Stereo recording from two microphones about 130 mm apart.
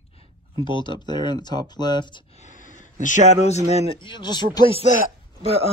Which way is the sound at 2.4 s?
80° left.